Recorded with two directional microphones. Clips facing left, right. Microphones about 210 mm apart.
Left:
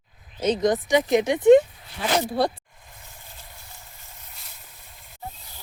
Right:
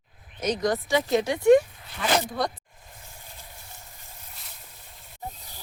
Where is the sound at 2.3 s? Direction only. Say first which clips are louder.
Left 5 dB; 30° left (ahead or behind).